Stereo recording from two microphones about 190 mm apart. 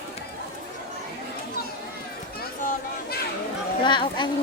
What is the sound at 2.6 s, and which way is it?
Chatter, 45° left (ahead or behind).